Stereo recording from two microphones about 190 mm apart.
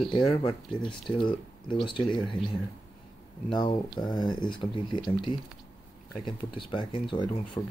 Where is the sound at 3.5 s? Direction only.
25° left (ahead or behind).